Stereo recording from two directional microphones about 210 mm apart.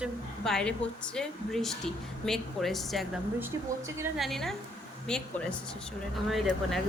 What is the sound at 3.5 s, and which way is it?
Speech, 15° right (ahead or behind).